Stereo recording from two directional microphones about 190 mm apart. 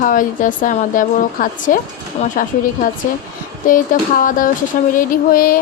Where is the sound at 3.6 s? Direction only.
45° left (ahead or behind).